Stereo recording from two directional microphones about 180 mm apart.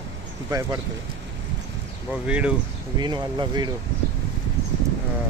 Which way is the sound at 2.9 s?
25° right (ahead or behind).